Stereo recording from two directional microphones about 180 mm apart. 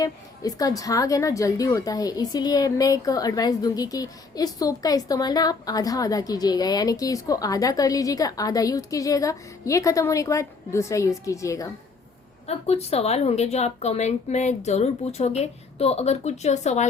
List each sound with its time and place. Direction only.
0.0 s a woman's voice: 20° left (ahead or behind)
12.5 s a woman's voice: 35° left (ahead or behind)